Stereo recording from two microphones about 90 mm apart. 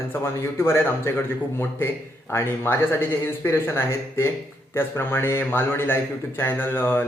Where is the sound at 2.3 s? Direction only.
25° left (ahead or behind).